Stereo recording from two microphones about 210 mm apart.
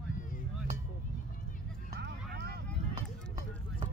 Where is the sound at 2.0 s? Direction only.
55° right (ahead or behind).